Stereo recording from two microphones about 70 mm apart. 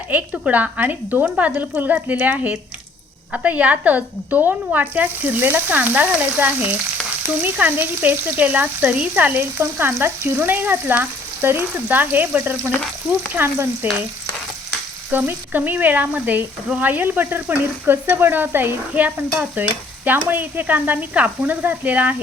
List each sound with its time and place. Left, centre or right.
0.1 s speech: right
13.3 s stir: right
15.1 s speech: right